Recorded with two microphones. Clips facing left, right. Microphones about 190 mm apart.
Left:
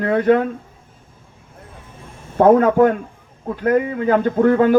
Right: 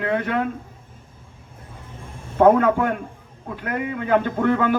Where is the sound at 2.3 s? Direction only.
40° left (ahead or behind).